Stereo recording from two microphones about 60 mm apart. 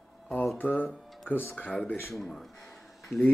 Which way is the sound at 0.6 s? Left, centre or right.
Left.